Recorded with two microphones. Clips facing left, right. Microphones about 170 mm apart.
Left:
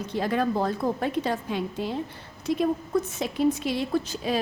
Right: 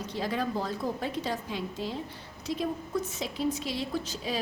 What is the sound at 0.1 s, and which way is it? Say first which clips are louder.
A woman's voice: left 6 dB; 55° left (ahead or behind).